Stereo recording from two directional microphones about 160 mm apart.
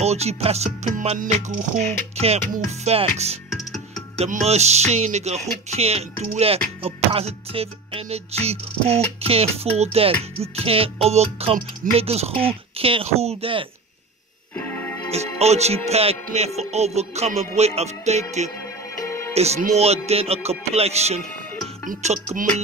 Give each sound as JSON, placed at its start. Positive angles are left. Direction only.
{"t": 0.0, "sound": "speech", "side_deg": -40}
{"t": 2.5, "sound": "music", "side_deg": -45}
{"t": 3.4, "sound": "music", "side_deg": 0}
{"t": 4.2, "sound": "speech", "side_deg": -40}
{"t": 14.5, "sound": "music", "side_deg": 10}
{"t": 15.3, "sound": "speech", "side_deg": -40}
{"t": 19.0, "sound": "music", "side_deg": 15}
{"t": 19.3, "sound": "speech", "side_deg": -40}
{"t": 21.8, "sound": "music", "side_deg": -45}